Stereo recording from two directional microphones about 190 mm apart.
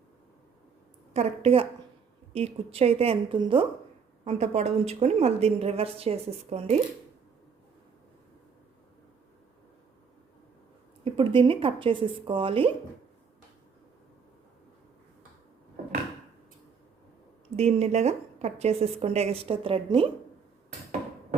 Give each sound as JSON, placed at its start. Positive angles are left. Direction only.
{"t": 1.1, "sound": "a woman's voice", "side_deg": -35}
{"t": 11.0, "sound": "speech", "side_deg": -25}
{"t": 17.6, "sound": "a woman's voice", "side_deg": -35}